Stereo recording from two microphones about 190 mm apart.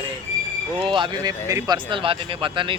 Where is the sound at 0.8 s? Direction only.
25° right (ahead or behind).